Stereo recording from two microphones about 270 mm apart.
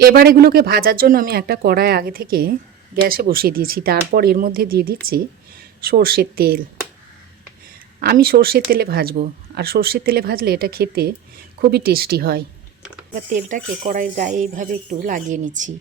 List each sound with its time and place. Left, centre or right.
0.0 s speech: right
8.0 s speech: right